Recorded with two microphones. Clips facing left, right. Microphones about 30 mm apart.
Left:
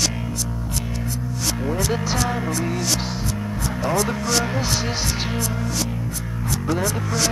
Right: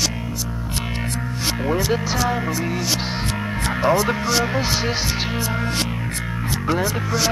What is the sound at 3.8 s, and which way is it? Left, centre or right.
Music, right.